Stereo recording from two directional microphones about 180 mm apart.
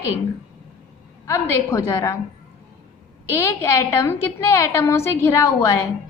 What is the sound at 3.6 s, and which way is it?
A woman's voice, 15° left (ahead or behind).